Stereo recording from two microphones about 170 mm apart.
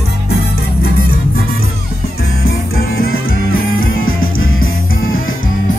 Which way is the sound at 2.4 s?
65° left (ahead or behind).